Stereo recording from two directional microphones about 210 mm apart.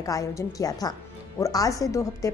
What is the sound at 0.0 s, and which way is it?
A woman's voice, 15° left (ahead or behind).